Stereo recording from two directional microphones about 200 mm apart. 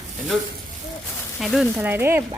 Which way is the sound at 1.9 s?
10° right (ahead or behind).